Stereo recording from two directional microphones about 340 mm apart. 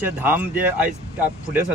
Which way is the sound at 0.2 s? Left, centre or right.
Centre.